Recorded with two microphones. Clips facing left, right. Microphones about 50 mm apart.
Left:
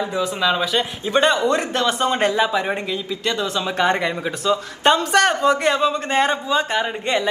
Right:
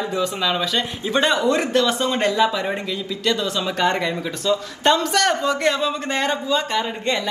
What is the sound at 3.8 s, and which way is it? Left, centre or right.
A man's voice, left.